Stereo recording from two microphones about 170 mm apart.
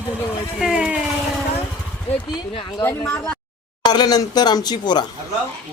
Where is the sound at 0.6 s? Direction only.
5° right (ahead or behind).